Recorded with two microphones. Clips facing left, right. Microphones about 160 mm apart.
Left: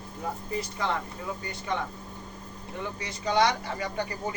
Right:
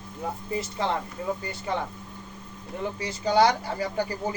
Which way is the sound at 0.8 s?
25° right (ahead or behind).